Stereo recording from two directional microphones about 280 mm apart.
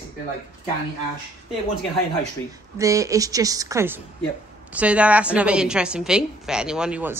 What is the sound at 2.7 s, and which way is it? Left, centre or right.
A woman's voice, centre.